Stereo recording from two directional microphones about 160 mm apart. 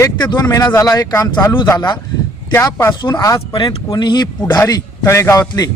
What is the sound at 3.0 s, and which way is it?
A man's voice, 25° left (ahead or behind).